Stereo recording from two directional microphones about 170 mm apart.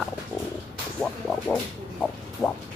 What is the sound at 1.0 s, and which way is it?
Speech, 5° left (ahead or behind).